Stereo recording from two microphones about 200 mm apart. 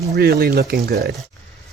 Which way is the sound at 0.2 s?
50° right (ahead or behind).